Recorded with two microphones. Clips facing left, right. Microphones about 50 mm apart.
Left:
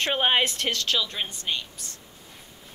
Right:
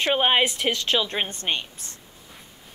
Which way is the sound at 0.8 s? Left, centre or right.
Right.